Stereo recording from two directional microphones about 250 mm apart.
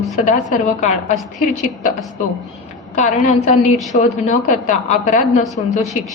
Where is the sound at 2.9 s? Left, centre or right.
Left.